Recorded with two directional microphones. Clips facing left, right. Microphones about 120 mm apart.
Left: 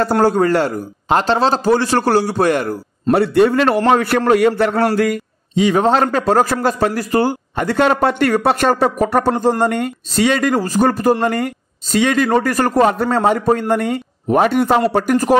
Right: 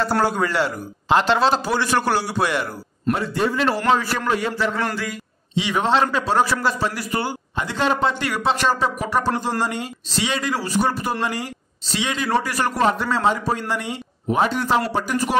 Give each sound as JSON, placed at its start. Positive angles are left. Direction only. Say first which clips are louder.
{"t": 0.2, "sound": "speech", "louder": "left 7 dB", "side_deg": 45}
{"t": 3.1, "sound": "a man's voice", "louder": "left 9 dB", "side_deg": 70}
{"t": 4.9, "sound": "a sound", "louder": "left 12 dB", "side_deg": 55}
{"t": 5.6, "sound": "a man's voice", "louder": "left 6 dB", "side_deg": 40}